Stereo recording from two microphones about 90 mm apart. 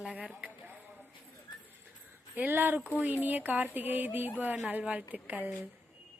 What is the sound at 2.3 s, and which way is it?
A woman's voice, 20° right (ahead or behind).